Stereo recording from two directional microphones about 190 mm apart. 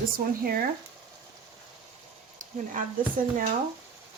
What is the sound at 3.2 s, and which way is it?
Speech, 45° right (ahead or behind).